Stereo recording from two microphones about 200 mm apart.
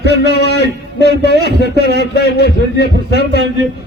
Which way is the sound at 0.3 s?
55° left (ahead or behind).